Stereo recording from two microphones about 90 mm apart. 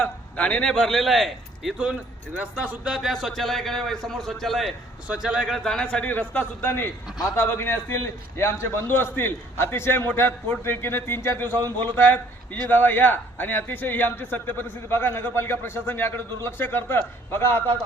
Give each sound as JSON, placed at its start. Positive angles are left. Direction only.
{"t": 0.0, "sound": "a man's voice", "side_deg": 10}
{"t": 1.8, "sound": "a man's voice", "side_deg": -10}